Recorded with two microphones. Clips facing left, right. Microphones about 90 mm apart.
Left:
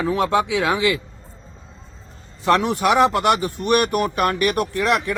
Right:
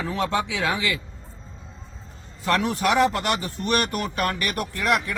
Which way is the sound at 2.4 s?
20° left (ahead or behind).